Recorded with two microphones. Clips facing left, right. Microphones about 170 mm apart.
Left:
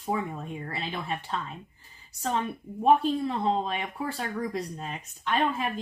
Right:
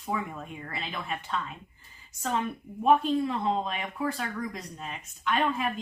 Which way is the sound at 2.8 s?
30° left (ahead or behind).